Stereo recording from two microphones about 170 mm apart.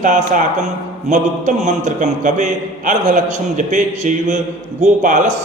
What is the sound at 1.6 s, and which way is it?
A man's voice, 45° right (ahead or behind).